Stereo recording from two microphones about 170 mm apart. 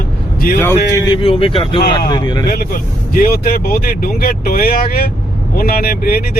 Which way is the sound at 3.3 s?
60° left (ahead or behind).